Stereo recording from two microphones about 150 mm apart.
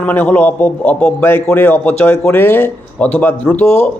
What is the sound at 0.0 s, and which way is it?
A man's voice, 10° left (ahead or behind).